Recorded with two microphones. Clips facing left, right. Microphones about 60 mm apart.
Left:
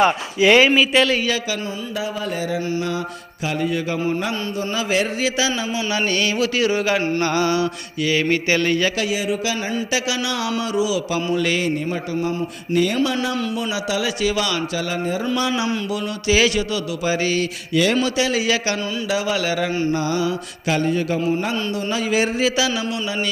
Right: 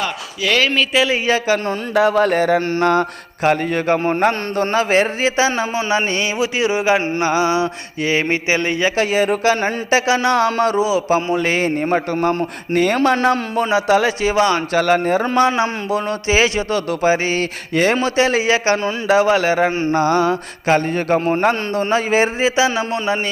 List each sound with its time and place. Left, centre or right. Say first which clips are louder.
0.0 s speech: left 6 dB; left
2.0 s a man's voice: right 12 dB; right
9.0 s speech: right 6 dB; right
11.9 s a man's voice: right 6 dB; right
14.7 s speech: right 8 dB; right